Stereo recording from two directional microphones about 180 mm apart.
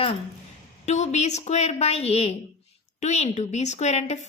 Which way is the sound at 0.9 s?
40° left (ahead or behind).